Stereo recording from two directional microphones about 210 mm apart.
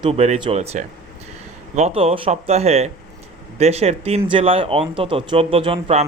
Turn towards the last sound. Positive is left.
turn(degrees=-25)  # may be behind; listen again after turning